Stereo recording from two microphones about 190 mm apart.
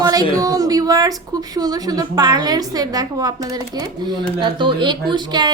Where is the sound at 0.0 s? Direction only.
20° right (ahead or behind).